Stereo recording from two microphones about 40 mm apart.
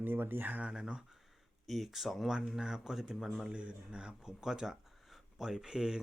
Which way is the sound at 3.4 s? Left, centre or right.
Right.